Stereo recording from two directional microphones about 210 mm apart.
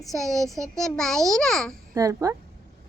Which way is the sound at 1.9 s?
15° right (ahead or behind).